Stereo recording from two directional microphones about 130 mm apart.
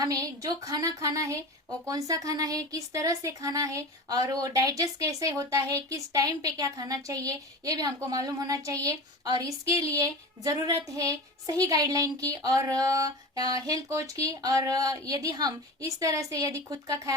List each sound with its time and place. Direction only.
0.0 s speech: 30° right (ahead or behind)